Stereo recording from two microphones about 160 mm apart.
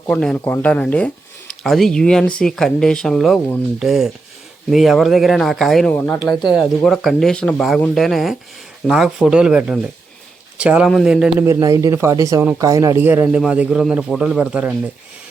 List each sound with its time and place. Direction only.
0.1 s speech: 5° left (ahead or behind)
5.9 s speech: 10° left (ahead or behind)
6.4 s speech: centre (ahead or behind)
11.4 s speech: 20° right (ahead or behind)